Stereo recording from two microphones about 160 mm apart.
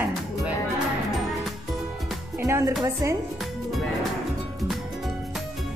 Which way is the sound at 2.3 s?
15° right (ahead or behind).